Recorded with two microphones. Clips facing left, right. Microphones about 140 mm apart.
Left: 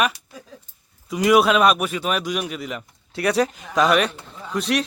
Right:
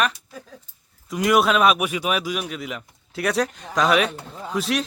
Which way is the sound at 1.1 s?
Centre (ahead or behind).